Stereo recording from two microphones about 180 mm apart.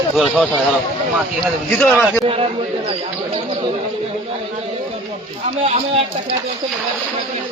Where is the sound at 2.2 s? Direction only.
30° right (ahead or behind).